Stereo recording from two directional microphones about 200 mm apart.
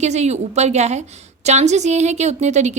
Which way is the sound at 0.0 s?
35° right (ahead or behind).